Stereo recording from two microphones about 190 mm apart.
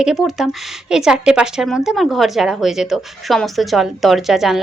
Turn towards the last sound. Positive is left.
turn(degrees=0)  # may be behind; listen again after turning